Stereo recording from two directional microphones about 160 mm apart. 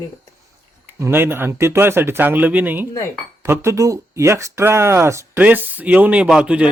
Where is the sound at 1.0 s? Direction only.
15° right (ahead or behind).